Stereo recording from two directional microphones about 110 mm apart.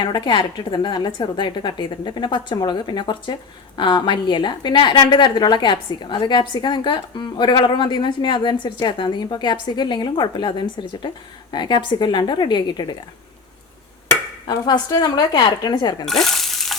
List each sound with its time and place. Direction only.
0.0 s a woman's voice: 45° left (ahead or behind)
14.4 s speech: 40° left (ahead or behind)
16.0 s frying: 5° left (ahead or behind)